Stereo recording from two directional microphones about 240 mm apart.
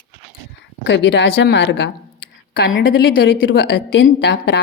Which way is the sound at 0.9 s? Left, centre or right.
Left.